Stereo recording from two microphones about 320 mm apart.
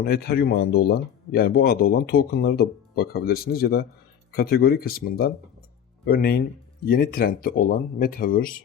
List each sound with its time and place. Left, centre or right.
0.0 s speech: left